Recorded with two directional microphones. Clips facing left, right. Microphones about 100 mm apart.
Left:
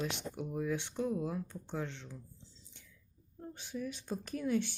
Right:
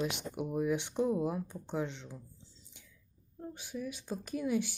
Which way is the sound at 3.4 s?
5° right (ahead or behind).